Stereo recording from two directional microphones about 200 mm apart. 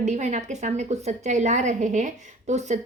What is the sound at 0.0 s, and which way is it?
A woman's voice, 35° right (ahead or behind).